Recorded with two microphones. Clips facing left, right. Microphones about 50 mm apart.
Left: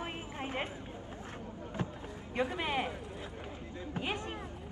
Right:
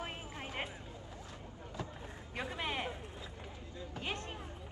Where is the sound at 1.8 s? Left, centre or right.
Left.